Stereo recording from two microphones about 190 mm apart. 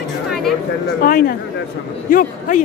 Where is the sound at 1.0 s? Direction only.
50° left (ahead or behind).